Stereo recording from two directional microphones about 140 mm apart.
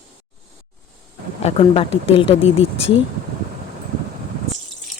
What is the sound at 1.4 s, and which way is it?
Speech, 45° left (ahead or behind).